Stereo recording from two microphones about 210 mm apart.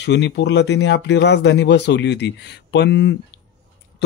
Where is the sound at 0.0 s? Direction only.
55° left (ahead or behind).